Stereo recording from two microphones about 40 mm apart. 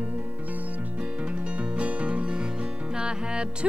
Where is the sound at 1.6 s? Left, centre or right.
Right.